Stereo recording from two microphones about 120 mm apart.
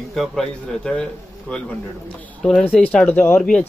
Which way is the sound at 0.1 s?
Centre (ahead or behind).